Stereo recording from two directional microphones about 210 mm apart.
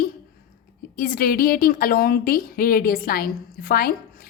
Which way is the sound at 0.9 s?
40° left (ahead or behind).